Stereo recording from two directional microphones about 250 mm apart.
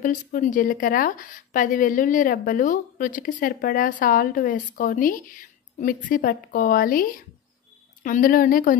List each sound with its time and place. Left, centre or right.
0.0 s a woman's voice: left